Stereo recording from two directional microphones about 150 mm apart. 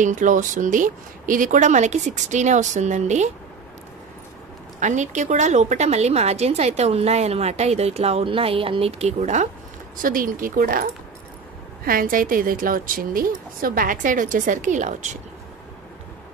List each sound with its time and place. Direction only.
0.0 s speech: 55° right (ahead or behind)
4.7 s a woman's voice: 55° right (ahead or behind)
10.0 s a woman's voice: 70° right (ahead or behind)